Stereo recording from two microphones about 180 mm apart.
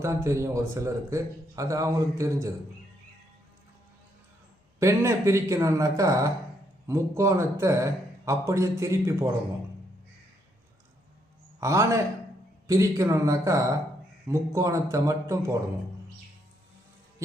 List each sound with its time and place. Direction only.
0.0 s a man's voice: 15° right (ahead or behind)
4.8 s a man's voice: 15° right (ahead or behind)
11.6 s a man's voice: 15° right (ahead or behind)